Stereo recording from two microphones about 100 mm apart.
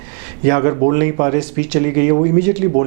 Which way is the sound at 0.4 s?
15° right (ahead or behind).